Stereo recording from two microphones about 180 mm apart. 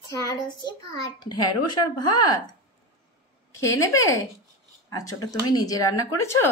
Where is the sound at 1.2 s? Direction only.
25° left (ahead or behind).